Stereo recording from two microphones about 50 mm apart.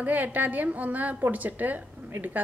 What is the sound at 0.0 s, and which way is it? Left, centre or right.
A woman's voice, right.